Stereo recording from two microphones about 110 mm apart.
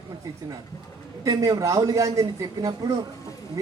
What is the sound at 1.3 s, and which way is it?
A man's voice, 30° right (ahead or behind).